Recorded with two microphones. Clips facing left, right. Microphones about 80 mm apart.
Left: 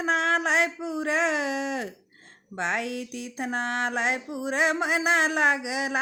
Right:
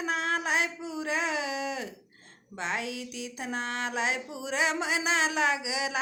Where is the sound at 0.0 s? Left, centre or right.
Left.